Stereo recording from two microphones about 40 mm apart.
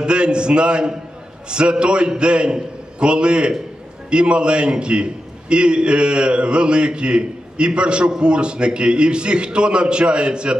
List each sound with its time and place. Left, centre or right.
0.0 s a man's voice: right